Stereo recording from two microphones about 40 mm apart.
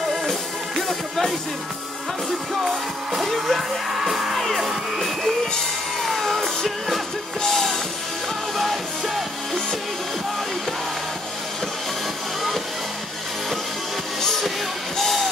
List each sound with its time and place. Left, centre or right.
0.7 s music: centre
2.5 s music: centre
15.0 s music: centre